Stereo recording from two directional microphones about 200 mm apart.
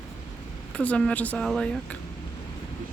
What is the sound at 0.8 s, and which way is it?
A woman's voice, 5° left (ahead or behind).